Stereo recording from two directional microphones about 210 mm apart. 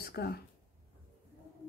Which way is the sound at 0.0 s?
50° left (ahead or behind).